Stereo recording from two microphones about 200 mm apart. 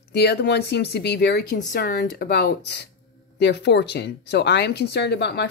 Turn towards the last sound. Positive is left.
turn(degrees=55)  # may be behind; listen again after turning